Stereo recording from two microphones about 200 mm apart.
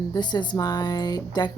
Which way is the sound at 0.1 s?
20° left (ahead or behind).